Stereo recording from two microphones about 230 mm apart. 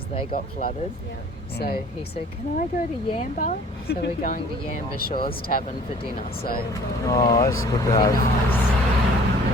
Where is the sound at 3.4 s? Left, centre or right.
Left.